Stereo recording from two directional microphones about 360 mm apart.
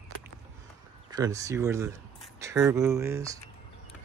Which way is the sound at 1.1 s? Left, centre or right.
Centre.